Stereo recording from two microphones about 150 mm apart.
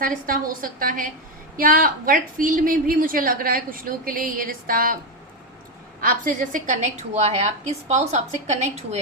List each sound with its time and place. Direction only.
0.0 s a woman's voice: 70° right (ahead or behind)
6.0 s a woman's voice: 65° right (ahead or behind); by 9.0 s 45° right (ahead or behind)